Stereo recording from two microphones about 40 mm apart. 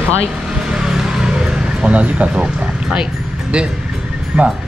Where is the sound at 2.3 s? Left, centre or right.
Right.